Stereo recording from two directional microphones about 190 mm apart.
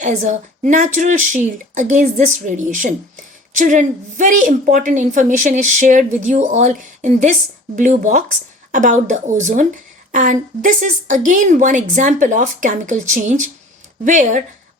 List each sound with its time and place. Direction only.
0.0 s a woman's voice: 40° right (ahead or behind)